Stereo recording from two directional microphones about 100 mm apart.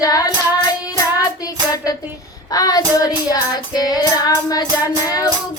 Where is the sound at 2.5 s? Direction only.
40° left (ahead or behind).